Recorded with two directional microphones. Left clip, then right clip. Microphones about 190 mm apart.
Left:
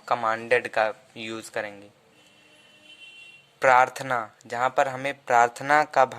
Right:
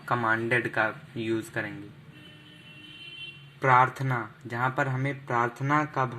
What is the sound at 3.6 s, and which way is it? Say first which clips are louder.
Speech: left 3 dB; 75° left (ahead or behind).